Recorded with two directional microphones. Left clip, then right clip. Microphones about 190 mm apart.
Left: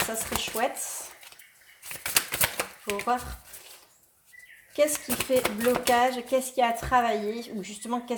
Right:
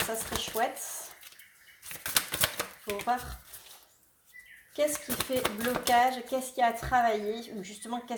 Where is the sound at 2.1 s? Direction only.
5° left (ahead or behind).